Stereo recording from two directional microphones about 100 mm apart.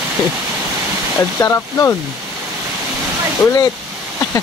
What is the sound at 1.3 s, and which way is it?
Speech, 30° left (ahead or behind).